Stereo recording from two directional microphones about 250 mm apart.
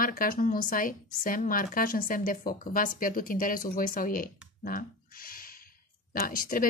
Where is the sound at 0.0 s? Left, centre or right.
Left.